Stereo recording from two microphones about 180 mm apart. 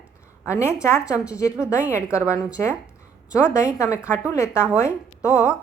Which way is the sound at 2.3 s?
15° left (ahead or behind).